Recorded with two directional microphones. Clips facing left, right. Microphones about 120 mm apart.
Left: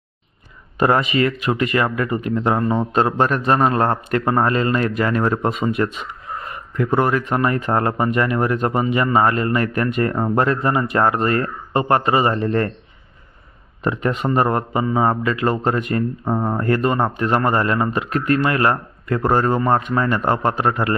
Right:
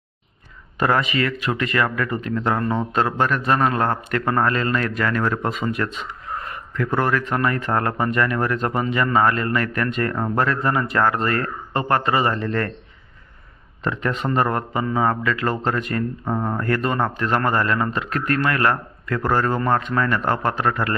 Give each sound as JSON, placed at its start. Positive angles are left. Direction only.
{"t": 0.8, "sound": "speech", "side_deg": 25}
{"t": 3.0, "sound": "speech", "side_deg": 30}
{"t": 13.8, "sound": "speech", "side_deg": 15}